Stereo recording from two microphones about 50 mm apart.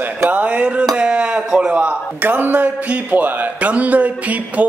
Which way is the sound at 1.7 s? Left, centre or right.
Right.